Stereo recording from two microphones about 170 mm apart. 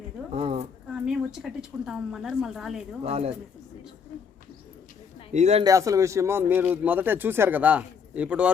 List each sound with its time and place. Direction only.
0.3 s speech: 35° right (ahead or behind)
0.9 s a woman's voice: 5° right (ahead or behind)
3.0 s speech: 35° right (ahead or behind)
5.3 s speech: 40° right (ahead or behind)
5.6 s speech: 20° right (ahead or behind)